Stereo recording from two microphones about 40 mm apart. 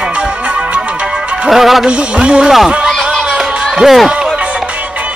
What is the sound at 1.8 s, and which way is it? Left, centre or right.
Music, right.